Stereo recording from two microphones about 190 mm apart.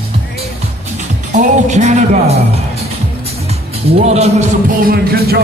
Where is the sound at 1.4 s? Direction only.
40° right (ahead or behind).